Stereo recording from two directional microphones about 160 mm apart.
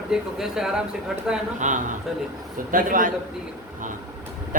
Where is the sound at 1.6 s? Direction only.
50° right (ahead or behind).